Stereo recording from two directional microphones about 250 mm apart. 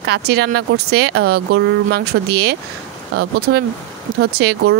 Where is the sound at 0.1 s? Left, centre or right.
Right.